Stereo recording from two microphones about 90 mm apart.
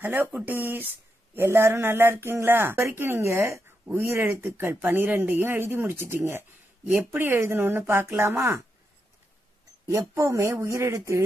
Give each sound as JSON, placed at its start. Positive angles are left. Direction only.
{"t": 0.0, "sound": "speech", "side_deg": -20}
{"t": 9.8, "sound": "speech", "side_deg": -40}